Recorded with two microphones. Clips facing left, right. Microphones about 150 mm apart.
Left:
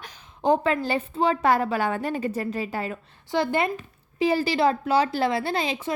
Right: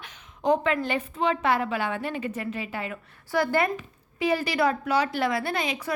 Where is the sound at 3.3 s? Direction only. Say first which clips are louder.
Even; 25° left (ahead or behind).